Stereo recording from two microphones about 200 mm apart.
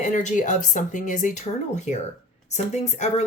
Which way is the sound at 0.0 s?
35° left (ahead or behind).